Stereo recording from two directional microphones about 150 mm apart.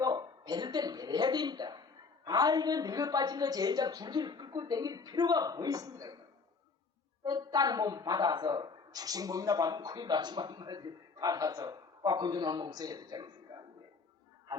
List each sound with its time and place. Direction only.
0.0 s a sound: 25° right (ahead or behind)
2.2 s speech: 25° right (ahead or behind)
7.3 s speech: 25° right (ahead or behind)